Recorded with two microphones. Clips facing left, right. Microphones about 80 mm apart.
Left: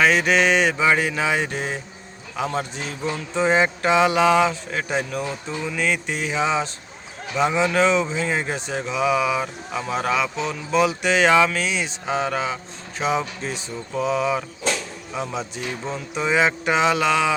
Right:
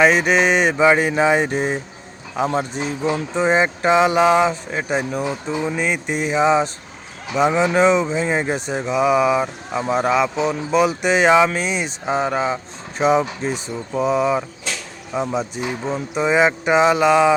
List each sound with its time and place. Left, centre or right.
0.0 s speech: centre
15.6 s speech: right